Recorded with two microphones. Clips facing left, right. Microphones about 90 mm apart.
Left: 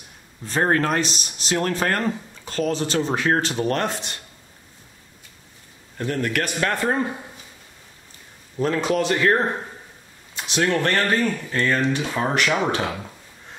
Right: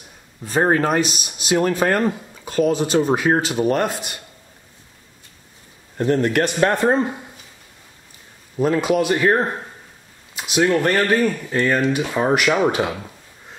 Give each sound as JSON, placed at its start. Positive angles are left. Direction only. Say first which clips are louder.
{"t": 0.5, "sound": "speech", "louder": "right 3 dB", "side_deg": -10}
{"t": 5.9, "sound": "a man's voice", "louder": "right 6 dB", "side_deg": -25}
{"t": 8.5, "sound": "speech", "louder": "right 3 dB", "side_deg": -10}